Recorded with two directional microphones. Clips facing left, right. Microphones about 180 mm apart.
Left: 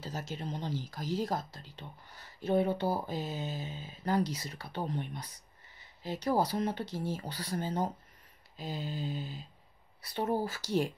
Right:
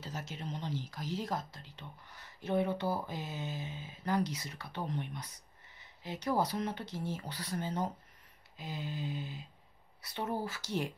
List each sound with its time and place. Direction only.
0.0 s speech: 35° left (ahead or behind)